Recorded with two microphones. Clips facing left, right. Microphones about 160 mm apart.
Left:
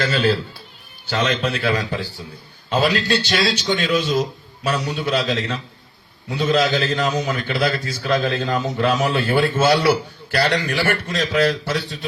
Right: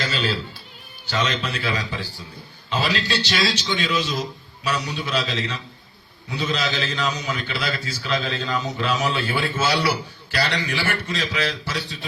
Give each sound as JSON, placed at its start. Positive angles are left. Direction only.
{"t": 0.0, "sound": "a man's voice", "side_deg": 55}